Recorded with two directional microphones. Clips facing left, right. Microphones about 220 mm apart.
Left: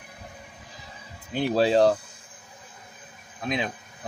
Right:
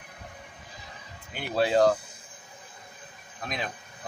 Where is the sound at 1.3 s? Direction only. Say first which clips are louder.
Left 4 dB; 35° left (ahead or behind).